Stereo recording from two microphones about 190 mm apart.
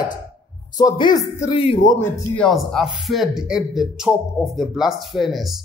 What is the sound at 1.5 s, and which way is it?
Speech, 30° left (ahead or behind).